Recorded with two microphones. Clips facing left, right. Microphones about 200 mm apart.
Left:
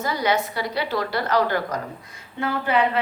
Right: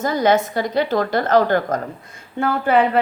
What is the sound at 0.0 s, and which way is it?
A woman's voice, 45° right (ahead or behind).